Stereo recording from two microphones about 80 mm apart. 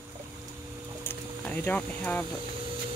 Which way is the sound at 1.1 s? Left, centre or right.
Left.